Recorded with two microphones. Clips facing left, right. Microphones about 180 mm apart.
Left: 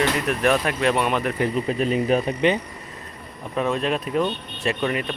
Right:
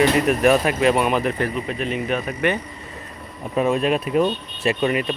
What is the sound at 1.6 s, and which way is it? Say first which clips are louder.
Speech: left 3 dB; 35° left (ahead or behind).